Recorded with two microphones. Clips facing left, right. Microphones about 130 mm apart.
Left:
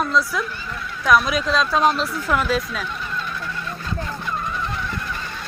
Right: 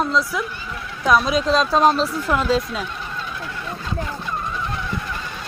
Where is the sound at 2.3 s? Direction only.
25° right (ahead or behind).